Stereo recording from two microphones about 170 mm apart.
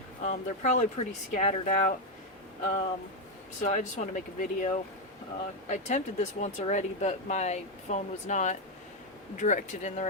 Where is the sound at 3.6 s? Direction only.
45° left (ahead or behind).